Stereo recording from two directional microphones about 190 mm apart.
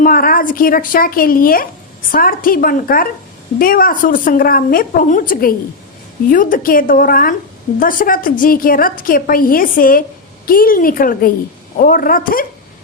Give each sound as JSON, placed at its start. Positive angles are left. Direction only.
{"t": 0.0, "sound": "a woman's voice", "side_deg": 50}